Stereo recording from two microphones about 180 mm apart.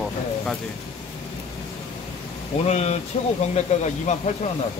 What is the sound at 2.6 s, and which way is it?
Speech, 35° left (ahead or behind).